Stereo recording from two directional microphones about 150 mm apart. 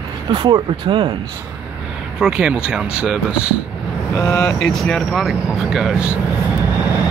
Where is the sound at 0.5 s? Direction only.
35° right (ahead or behind).